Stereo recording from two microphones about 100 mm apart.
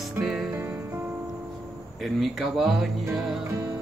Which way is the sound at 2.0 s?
5° right (ahead or behind).